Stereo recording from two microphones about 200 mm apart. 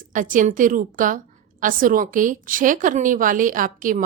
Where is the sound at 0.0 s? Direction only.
40° right (ahead or behind).